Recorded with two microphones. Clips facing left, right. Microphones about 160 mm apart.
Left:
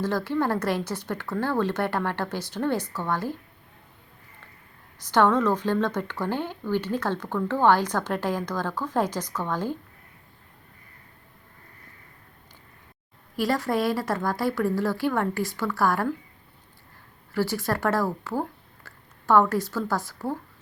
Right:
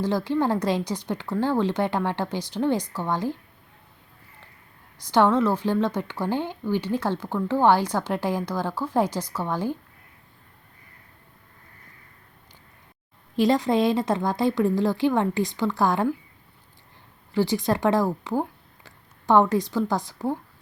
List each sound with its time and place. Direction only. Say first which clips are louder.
0.0 s speech: right 2 dB; 15° right (ahead or behind)
5.1 s speech: right 1 dB; 10° right (ahead or behind)
13.3 s a woman's voice: right 4 dB; 20° right (ahead or behind)
17.3 s speech: right 3 dB; 15° right (ahead or behind)